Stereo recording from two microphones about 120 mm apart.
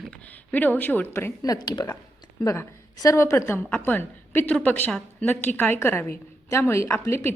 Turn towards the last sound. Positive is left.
turn(degrees=20)  # may be behind; listen again after turning